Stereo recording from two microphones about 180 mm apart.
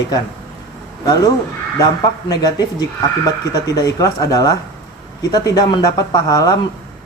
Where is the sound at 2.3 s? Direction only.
20° left (ahead or behind).